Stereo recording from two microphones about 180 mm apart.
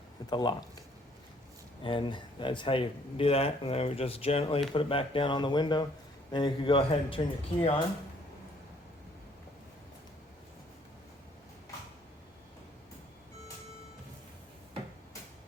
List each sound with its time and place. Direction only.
0.3 s speech: 25° left (ahead or behind)
1.8 s speech: 30° left (ahead or behind)